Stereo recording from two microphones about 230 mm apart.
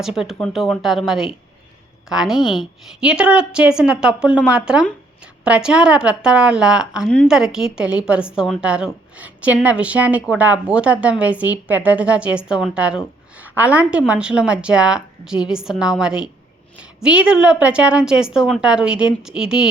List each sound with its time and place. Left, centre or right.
0.0 s a woman's voice: centre